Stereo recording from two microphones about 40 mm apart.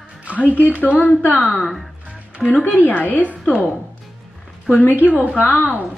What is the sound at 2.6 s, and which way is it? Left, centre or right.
Speech, left.